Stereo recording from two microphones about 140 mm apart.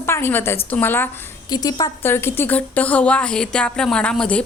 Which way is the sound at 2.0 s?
15° left (ahead or behind).